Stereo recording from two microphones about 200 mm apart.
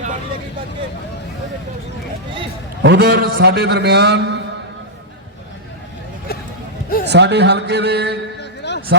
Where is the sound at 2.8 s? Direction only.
50° right (ahead or behind).